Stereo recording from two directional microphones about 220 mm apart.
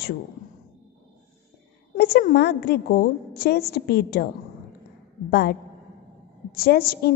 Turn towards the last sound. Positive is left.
turn(degrees=45)  # may be behind; listen again after turning